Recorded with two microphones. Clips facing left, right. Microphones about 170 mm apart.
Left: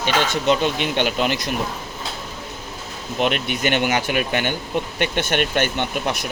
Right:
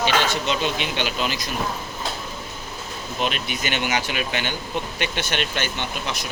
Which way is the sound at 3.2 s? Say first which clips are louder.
Left 6 dB; 60° left (ahead or behind).